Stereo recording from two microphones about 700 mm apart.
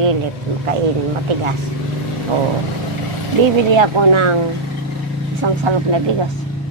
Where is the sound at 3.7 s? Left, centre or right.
Right.